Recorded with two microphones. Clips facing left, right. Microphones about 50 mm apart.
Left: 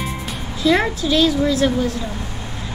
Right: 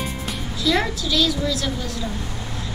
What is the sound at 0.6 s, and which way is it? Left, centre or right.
A woman's voice, left.